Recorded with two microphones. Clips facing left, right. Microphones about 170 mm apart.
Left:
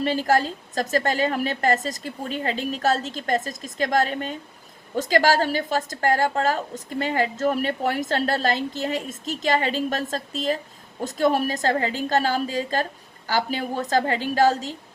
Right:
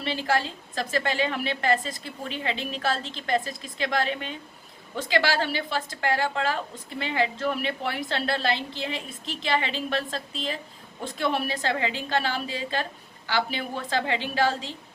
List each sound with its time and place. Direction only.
0.0 s a woman's voice: 45° left (ahead or behind)